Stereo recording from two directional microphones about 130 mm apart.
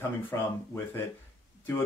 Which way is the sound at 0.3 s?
20° left (ahead or behind).